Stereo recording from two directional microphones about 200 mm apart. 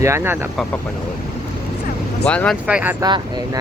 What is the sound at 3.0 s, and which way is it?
Speech, 20° right (ahead or behind).